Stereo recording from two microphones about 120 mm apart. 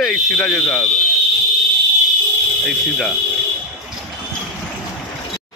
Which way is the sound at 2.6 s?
5° left (ahead or behind).